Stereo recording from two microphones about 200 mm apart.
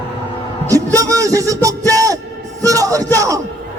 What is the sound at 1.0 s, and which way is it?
A man's voice, 15° right (ahead or behind).